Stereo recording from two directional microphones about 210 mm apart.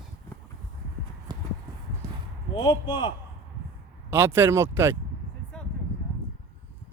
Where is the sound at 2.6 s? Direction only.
20° left (ahead or behind).